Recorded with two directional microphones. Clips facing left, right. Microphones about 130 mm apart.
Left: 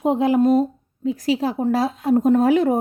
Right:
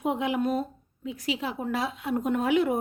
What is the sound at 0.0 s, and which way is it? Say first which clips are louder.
A woman's voice: left 10 dB; 35° left (ahead or behind).